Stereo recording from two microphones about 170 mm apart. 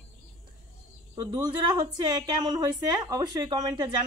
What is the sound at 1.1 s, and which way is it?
A woman's voice, 25° right (ahead or behind).